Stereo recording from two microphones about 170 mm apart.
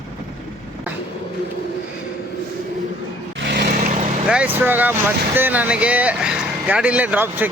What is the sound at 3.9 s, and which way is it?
Vehicle, 45° right (ahead or behind).